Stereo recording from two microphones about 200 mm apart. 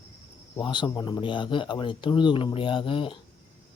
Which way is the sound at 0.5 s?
25° left (ahead or behind).